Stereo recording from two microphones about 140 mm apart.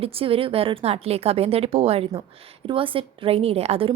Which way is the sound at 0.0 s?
40° right (ahead or behind).